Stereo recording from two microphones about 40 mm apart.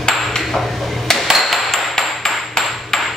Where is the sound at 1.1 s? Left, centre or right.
Centre.